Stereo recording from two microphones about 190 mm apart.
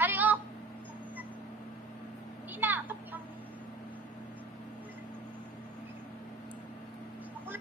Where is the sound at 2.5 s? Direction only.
10° right (ahead or behind).